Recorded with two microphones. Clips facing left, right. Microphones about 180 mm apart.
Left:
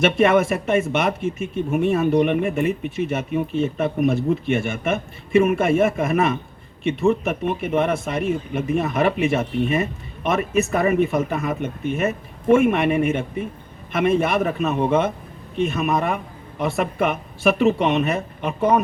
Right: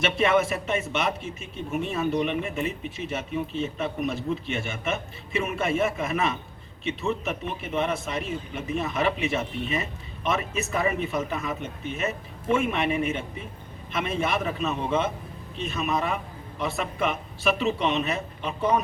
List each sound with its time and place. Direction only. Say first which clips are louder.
0.0 s speech: left 6 dB; 50° left (ahead or behind)